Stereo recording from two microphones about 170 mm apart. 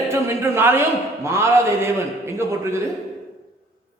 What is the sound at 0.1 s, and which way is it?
A man's voice, 15° right (ahead or behind).